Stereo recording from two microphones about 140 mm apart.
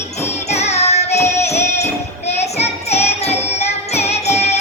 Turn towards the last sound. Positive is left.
turn(degrees=50)  # may be behind; listen again after turning